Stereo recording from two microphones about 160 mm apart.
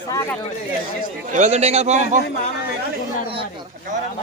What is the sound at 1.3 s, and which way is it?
Speech, 45° right (ahead or behind).